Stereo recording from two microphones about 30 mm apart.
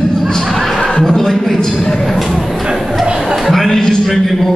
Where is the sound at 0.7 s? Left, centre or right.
Left.